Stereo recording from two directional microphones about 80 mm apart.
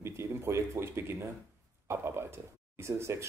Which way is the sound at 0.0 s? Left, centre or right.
Right.